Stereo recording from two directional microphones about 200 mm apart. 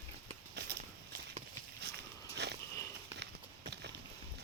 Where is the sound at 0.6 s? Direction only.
55° right (ahead or behind).